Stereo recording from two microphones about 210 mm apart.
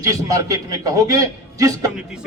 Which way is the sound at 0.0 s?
15° right (ahead or behind).